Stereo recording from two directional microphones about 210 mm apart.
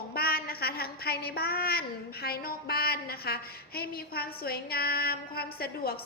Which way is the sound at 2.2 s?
45° left (ahead or behind).